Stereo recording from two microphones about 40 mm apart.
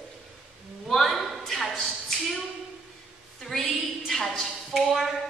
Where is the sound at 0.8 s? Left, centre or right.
Centre.